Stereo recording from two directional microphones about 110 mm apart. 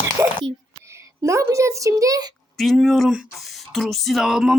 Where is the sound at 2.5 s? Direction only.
Centre (ahead or behind).